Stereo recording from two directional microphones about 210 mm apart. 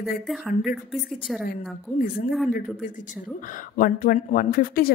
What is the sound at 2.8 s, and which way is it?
Speech, 35° left (ahead or behind).